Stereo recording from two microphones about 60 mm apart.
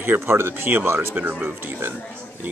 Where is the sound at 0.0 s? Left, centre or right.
Right.